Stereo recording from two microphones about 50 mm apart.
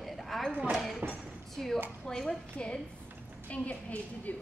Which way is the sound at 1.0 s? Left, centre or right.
Right.